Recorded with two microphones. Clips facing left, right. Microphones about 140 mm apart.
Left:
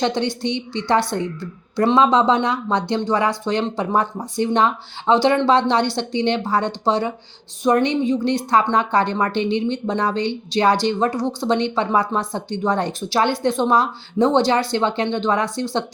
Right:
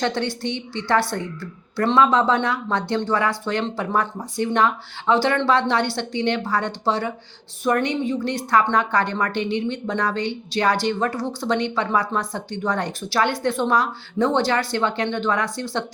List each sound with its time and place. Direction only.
0.0 s a woman's voice: 20° left (ahead or behind)